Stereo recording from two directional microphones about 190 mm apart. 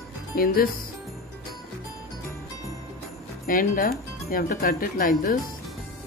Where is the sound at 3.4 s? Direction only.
45° left (ahead or behind).